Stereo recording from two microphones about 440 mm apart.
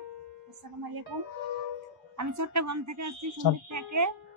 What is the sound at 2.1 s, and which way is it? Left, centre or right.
A woman's voice, right.